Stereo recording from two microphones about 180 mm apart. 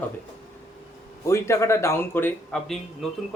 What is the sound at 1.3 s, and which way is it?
A man's voice, 15° left (ahead or behind).